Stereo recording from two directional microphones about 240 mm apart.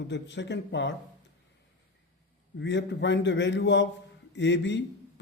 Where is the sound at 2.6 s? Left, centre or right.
Left.